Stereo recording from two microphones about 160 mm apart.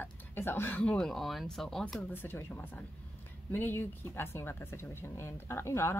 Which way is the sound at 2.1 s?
15° left (ahead or behind).